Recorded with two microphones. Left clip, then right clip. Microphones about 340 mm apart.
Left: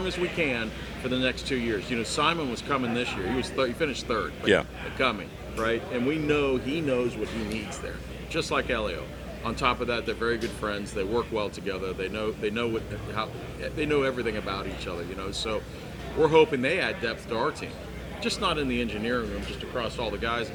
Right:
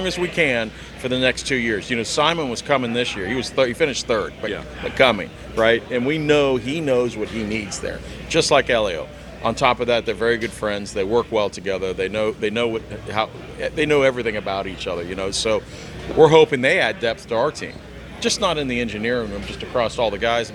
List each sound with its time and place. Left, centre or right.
0.0 s speech: right
5.5 s speech: right
8.3 s speech: right